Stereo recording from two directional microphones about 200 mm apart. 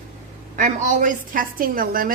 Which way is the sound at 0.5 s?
40° right (ahead or behind).